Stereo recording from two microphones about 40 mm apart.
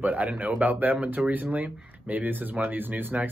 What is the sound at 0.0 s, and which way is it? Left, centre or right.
Speech, right.